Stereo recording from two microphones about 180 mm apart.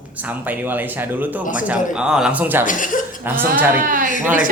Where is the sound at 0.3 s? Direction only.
10° right (ahead or behind).